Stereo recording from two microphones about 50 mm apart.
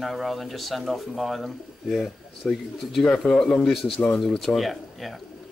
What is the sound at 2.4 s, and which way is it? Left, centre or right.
Speech, left.